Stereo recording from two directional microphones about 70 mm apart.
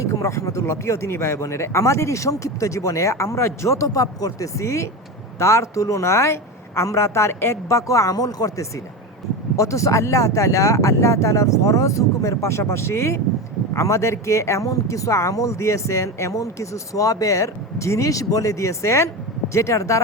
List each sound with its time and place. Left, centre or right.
0.0 s speech: left
9.6 s speech: left